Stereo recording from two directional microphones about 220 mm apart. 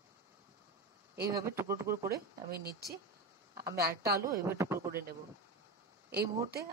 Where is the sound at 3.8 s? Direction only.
45° right (ahead or behind).